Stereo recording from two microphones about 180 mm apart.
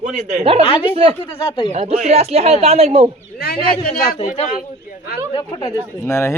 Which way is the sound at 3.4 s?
60° left (ahead or behind).